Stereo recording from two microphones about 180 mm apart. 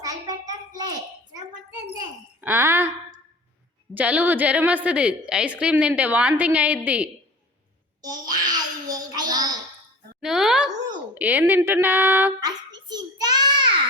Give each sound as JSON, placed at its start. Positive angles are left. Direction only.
{"t": 0.0, "sound": "a sound", "side_deg": -20}
{"t": 2.4, "sound": "a woman's voice", "side_deg": -10}
{"t": 8.0, "sound": "babbling", "side_deg": -20}
{"t": 10.2, "sound": "a sound", "side_deg": -5}
{"t": 11.1, "sound": "a woman's voice", "side_deg": -10}
{"t": 12.9, "sound": "child singing", "side_deg": -20}